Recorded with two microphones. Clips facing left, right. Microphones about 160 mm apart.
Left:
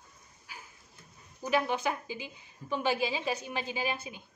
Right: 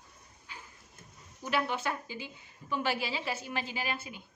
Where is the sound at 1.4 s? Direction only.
15° left (ahead or behind).